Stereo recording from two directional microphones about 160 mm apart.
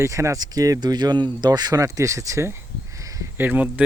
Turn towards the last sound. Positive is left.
turn(degrees=-10)  # may be behind; listen again after turning